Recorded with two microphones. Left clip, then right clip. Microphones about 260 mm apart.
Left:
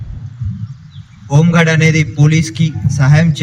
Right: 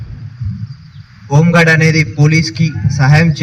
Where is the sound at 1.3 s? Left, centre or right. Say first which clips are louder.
Right 3 dB; right.